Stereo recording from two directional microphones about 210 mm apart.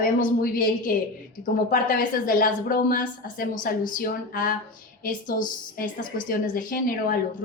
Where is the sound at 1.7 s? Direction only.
40° left (ahead or behind).